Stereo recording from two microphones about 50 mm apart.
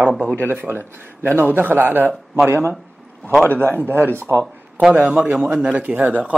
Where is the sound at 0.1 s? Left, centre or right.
Centre.